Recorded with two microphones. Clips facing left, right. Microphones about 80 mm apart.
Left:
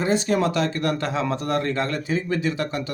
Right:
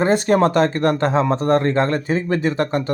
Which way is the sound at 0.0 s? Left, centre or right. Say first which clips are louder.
Right 6 dB; right.